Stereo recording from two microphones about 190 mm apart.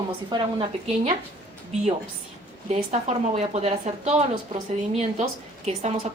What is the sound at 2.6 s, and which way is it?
A woman's voice, 35° right (ahead or behind).